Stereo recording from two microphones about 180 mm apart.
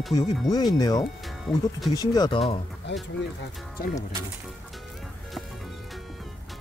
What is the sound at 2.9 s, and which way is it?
Speech, 75° left (ahead or behind).